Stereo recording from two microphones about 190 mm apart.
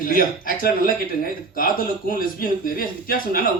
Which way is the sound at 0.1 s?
50° left (ahead or behind).